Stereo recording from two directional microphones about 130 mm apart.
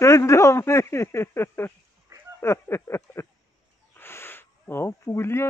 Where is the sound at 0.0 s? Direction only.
25° left (ahead or behind).